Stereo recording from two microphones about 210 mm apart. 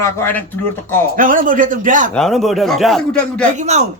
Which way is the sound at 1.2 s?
40° right (ahead or behind).